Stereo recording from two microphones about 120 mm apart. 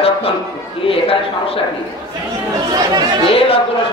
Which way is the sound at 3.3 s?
50° left (ahead or behind).